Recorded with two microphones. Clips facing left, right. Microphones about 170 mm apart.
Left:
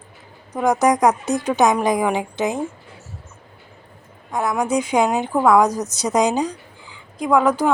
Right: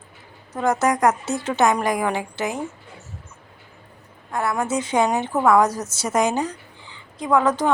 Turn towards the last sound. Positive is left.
turn(degrees=10)  # may be behind; listen again after turning